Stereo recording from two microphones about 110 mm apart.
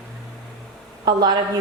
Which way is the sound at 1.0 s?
40° right (ahead or behind).